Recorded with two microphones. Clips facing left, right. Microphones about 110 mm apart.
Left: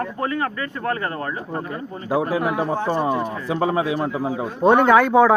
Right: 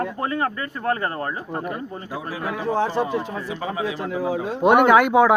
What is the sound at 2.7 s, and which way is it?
Speech, 90° right.